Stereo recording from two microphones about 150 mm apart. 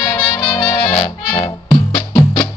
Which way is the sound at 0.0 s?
30° left (ahead or behind).